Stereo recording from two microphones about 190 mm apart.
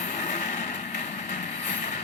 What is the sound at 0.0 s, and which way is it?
Vehicle, 40° left (ahead or behind).